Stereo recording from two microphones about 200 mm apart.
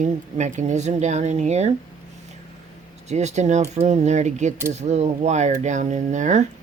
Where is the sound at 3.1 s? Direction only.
35° right (ahead or behind).